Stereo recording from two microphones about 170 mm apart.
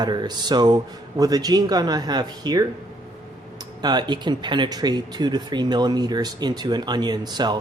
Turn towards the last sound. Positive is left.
turn(degrees=-25)  # may be behind; listen again after turning